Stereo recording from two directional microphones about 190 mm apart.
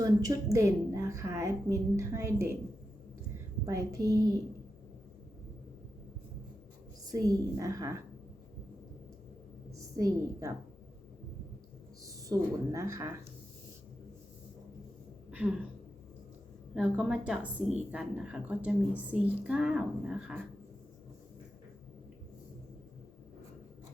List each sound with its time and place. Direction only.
0.0 s a woman's voice: 20° right (ahead or behind)
3.7 s a woman's voice: 15° right (ahead or behind)
7.0 s a woman's voice: 20° right (ahead or behind)
9.7 s a woman's voice: 15° right (ahead or behind)
12.0 s a woman's voice: 15° right (ahead or behind)
15.3 s a sound: 5° right (ahead or behind)
16.7 s a woman's voice: 5° right (ahead or behind)